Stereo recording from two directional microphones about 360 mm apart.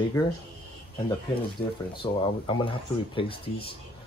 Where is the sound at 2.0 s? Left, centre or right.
Centre.